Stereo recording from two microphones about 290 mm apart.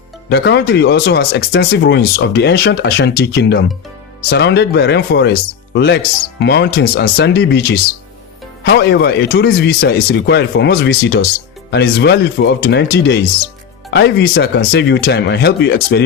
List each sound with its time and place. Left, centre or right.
0.3 s speech: left